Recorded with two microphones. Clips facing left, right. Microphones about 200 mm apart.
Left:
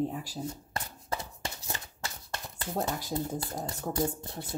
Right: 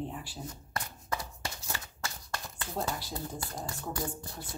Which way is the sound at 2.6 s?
45° left (ahead or behind).